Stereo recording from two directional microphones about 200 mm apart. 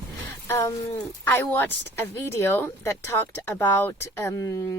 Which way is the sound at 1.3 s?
10° left (ahead or behind).